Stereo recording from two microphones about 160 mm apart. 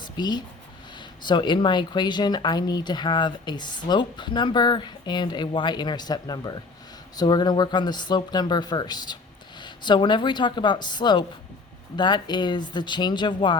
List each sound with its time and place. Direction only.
0.0 s speech: 25° left (ahead or behind)